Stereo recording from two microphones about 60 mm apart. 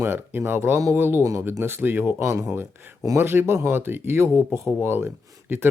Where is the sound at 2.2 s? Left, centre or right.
Right.